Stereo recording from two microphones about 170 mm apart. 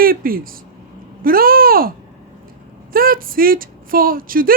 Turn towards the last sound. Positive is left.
turn(degrees=-55)  # may be behind; listen again after turning